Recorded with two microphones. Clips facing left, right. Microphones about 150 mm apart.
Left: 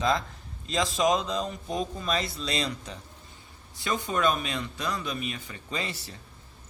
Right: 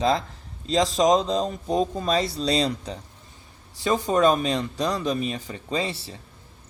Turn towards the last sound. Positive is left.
turn(degrees=-30)  # may be behind; listen again after turning